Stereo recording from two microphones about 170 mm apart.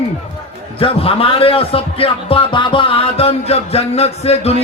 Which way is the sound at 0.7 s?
35° left (ahead or behind).